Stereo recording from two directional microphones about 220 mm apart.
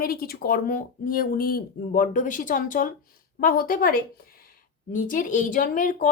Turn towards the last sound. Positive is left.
turn(degrees=35)  # may be behind; listen again after turning